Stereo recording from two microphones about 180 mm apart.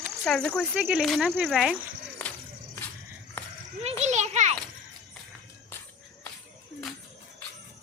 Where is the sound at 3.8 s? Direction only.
40° right (ahead or behind).